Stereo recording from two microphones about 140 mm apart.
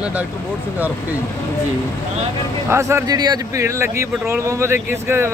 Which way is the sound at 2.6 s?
20° right (ahead or behind).